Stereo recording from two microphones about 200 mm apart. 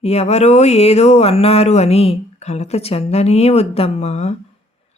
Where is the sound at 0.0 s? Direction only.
30° left (ahead or behind).